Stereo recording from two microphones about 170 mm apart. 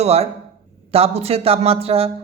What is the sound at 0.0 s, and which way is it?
A woman's voice, 40° right (ahead or behind).